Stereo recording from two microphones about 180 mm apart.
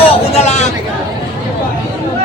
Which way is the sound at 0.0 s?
35° left (ahead or behind).